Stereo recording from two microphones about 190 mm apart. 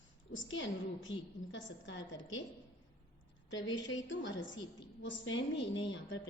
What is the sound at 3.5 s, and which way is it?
A woman's voice, 75° left (ahead or behind).